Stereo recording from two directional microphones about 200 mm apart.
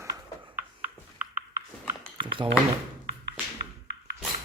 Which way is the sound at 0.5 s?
10° right (ahead or behind).